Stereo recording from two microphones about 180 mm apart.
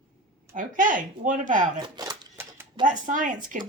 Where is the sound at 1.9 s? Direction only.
20° right (ahead or behind).